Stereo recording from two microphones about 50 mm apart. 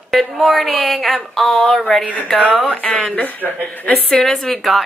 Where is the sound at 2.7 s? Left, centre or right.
Centre.